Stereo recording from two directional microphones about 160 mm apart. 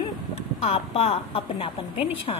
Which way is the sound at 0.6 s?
35° left (ahead or behind).